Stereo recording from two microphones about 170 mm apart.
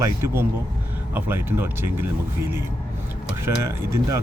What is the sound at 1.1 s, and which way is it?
Speech, 15° right (ahead or behind).